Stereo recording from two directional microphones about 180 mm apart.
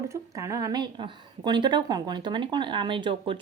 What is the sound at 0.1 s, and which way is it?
A woman's voice, 15° right (ahead or behind).